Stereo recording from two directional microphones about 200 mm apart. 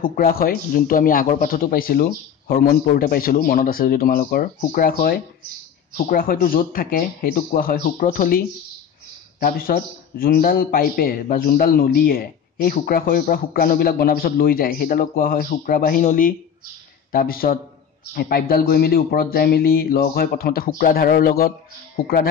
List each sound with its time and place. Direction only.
0.0 s a man's voice: 45° left (ahead or behind)